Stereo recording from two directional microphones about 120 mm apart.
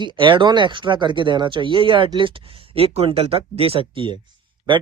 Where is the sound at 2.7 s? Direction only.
55° right (ahead or behind).